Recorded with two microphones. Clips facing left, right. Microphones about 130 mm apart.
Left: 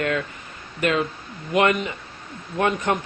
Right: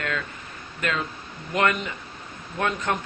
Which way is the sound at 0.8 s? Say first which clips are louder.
Left 6 dB; 15° left (ahead or behind).